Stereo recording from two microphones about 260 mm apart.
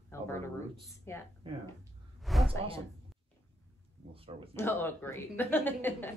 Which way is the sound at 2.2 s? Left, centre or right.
Centre.